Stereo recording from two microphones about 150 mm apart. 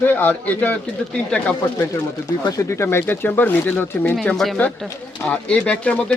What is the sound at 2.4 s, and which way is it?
Speech, 20° left (ahead or behind).